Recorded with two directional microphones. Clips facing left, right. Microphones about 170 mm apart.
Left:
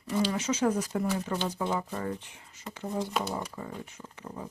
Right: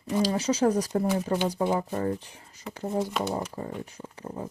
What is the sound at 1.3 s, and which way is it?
Speech, 15° right (ahead or behind).